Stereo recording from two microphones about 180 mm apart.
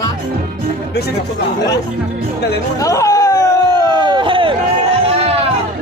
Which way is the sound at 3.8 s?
25° right (ahead or behind).